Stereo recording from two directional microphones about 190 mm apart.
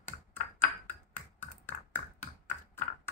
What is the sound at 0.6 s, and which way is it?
Ping, 10° left (ahead or behind).